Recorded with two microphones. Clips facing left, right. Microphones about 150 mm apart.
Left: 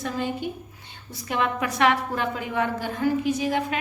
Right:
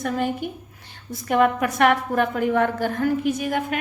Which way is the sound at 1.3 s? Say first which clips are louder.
Right 6 dB; 50° right (ahead or behind).